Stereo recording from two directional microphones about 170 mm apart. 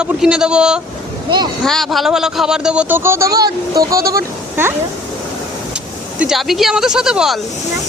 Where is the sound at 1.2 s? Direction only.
25° right (ahead or behind).